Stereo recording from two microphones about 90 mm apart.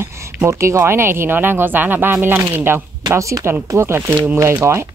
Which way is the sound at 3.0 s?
40° right (ahead or behind).